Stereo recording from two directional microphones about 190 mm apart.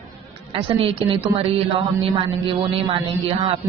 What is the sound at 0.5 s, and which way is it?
A man's voice, 30° right (ahead or behind).